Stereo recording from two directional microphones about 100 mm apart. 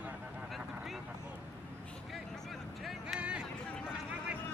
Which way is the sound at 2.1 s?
Centre (ahead or behind).